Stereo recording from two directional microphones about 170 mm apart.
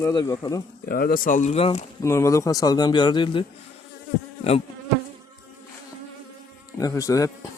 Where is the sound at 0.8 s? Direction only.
60° left (ahead or behind); by 1.8 s 35° left (ahead or behind).